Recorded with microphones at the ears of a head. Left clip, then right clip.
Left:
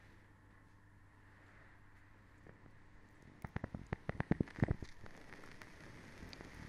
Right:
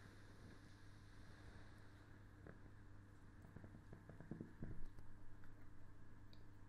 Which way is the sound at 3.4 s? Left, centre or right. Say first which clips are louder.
Left 17 dB; left.